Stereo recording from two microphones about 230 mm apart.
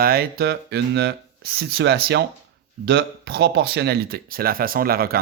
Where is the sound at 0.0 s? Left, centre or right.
Right.